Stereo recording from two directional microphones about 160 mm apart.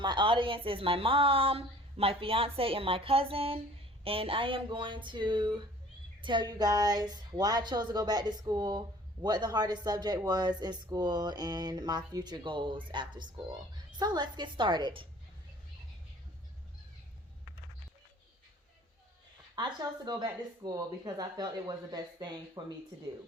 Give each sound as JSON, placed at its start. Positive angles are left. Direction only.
{"t": 0.0, "sound": "a woman's voice", "side_deg": -30}
{"t": 19.5, "sound": "speech", "side_deg": -25}